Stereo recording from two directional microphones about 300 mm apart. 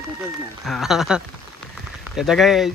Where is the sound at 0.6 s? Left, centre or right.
Centre.